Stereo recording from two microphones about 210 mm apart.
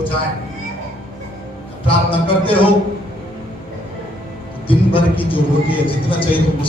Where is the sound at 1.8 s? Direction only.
25° left (ahead or behind).